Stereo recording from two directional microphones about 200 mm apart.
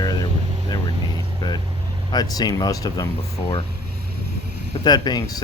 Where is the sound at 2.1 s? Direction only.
20° left (ahead or behind).